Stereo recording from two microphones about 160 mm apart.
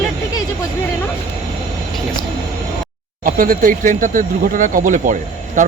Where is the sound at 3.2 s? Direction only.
60° right (ahead or behind).